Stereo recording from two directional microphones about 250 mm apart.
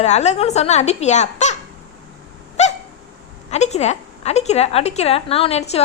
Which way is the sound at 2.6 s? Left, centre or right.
Left.